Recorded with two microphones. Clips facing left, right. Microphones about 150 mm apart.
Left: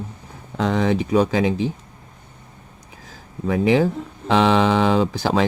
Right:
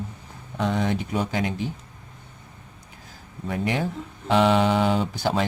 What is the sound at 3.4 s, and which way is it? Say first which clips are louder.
Speech: left 9 dB; 90° left.